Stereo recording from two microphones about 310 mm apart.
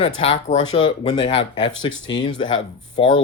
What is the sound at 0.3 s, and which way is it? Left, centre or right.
Speech, centre.